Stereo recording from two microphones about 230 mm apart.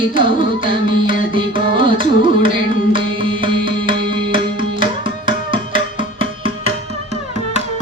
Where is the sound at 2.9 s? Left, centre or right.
Right.